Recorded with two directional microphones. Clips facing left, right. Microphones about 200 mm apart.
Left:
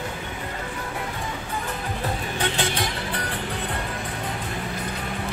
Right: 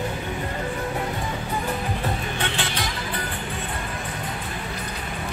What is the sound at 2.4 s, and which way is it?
Music, 40° left (ahead or behind).